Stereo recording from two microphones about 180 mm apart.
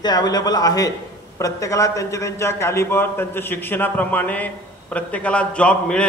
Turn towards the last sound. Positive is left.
turn(degrees=5)  # may be behind; listen again after turning